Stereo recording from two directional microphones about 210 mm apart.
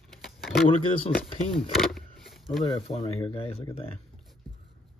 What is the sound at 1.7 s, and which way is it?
Vehicle, centre (ahead or behind).